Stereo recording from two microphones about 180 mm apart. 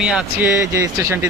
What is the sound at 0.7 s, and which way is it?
Speech, 15° right (ahead or behind).